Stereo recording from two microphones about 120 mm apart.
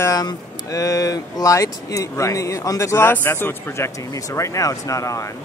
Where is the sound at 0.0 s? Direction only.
30° left (ahead or behind).